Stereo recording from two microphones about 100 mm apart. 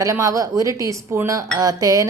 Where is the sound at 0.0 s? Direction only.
35° right (ahead or behind).